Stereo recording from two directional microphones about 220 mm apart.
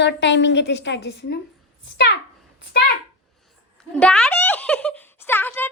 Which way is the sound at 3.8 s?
5° left (ahead or behind).